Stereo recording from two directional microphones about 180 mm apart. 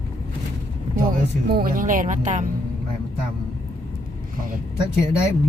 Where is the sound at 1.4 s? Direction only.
55° right (ahead or behind).